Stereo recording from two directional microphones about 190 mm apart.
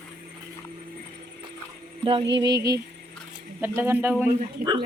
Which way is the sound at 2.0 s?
25° right (ahead or behind).